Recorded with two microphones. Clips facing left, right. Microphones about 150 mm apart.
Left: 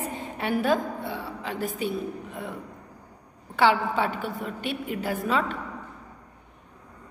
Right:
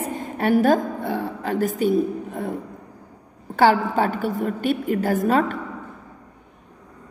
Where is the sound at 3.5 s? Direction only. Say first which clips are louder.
Right 5 dB; 45° right (ahead or behind).